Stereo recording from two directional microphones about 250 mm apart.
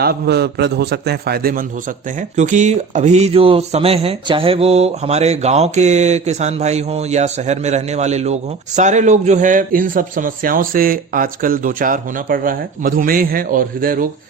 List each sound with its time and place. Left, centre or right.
0.0 s a man's voice: right